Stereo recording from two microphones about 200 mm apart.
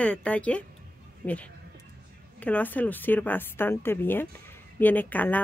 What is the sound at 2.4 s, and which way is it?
A woman's voice, 10° left (ahead or behind).